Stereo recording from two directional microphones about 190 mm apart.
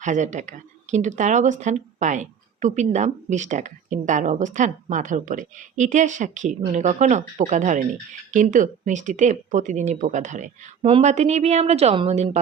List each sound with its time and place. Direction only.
0.0 s speech: 40° right (ahead or behind)